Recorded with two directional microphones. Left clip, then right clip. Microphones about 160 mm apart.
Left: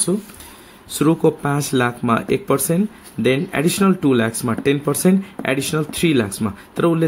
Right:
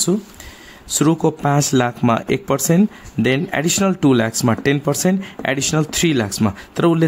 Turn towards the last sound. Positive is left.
turn(degrees=-35)  # may be behind; listen again after turning